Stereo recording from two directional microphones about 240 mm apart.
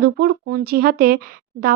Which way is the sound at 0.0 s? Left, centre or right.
Right.